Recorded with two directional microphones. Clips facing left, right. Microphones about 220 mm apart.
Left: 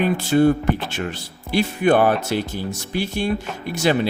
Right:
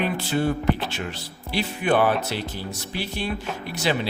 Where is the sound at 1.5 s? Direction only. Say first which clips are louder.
Left 5 dB; 45° left (ahead or behind).